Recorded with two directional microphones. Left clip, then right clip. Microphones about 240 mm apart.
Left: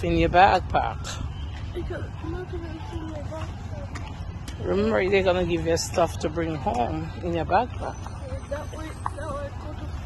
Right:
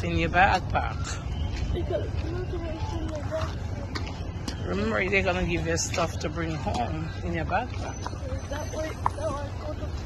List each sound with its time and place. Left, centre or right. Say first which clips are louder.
0.0 s speech: left 5 dB; left
4.6 s speech: left 5 dB; left